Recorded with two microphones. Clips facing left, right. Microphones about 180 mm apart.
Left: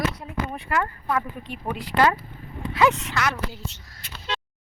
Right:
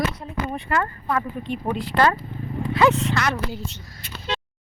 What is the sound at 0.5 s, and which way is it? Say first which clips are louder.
Speech: right 2 dB; 5° left (ahead or behind).